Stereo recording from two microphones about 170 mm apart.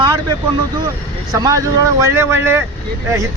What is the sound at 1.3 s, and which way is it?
Speech, 20° right (ahead or behind).